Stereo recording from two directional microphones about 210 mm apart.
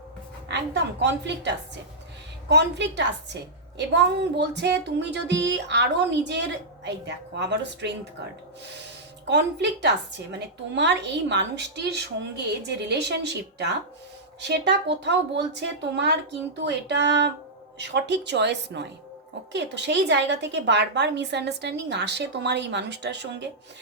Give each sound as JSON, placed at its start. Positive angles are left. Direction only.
{"t": 0.4, "sound": "a woman's voice", "side_deg": -55}